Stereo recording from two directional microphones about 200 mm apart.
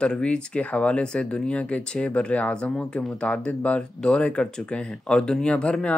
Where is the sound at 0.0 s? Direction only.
5° left (ahead or behind).